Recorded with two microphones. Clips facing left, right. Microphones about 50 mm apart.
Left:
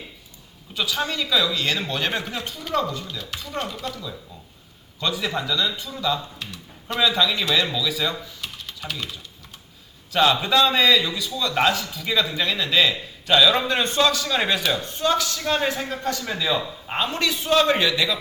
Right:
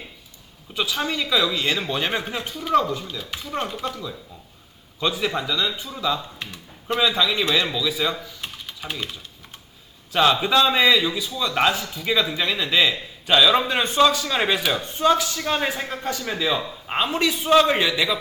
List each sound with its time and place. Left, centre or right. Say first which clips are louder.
0.7 s a man's voice: right 1 dB; centre
10.1 s a man's voice: right 1 dB; centre